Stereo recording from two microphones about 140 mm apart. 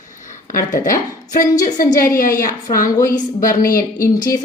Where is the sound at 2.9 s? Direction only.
25° left (ahead or behind).